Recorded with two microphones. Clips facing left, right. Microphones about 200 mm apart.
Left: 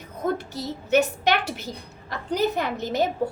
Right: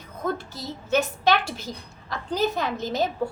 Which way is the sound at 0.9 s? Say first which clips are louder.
Left 1 dB; 15° left (ahead or behind).